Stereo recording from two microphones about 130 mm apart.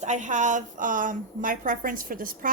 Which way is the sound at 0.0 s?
70° right (ahead or behind).